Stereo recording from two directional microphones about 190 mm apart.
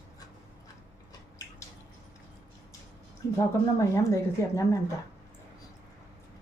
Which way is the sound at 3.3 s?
15° left (ahead or behind).